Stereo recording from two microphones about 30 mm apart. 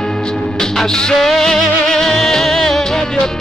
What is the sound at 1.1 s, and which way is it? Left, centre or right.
Music, centre.